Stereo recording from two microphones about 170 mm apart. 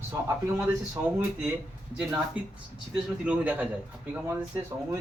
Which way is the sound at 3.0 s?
5° right (ahead or behind).